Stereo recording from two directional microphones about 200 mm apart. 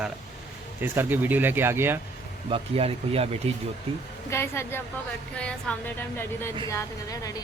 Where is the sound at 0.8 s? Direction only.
10° right (ahead or behind).